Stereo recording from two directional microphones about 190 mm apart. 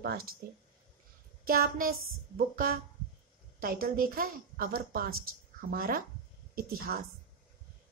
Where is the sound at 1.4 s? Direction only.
50° right (ahead or behind).